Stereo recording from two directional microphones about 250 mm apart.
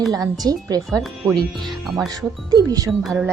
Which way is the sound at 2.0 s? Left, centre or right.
Centre.